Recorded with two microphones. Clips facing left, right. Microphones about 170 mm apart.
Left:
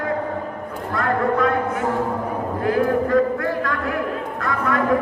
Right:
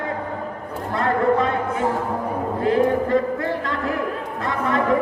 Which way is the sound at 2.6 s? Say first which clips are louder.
Right 1 dB; 25° right (ahead or behind).